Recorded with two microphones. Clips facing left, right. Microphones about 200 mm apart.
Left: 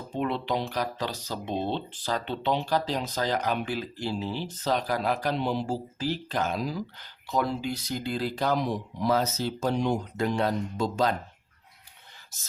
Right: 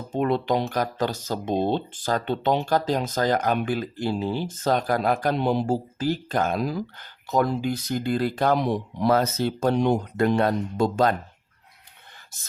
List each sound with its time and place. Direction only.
0.1 s speech: 45° right (ahead or behind)